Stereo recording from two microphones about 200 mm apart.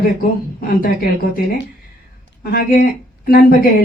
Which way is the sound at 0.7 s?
45° left (ahead or behind).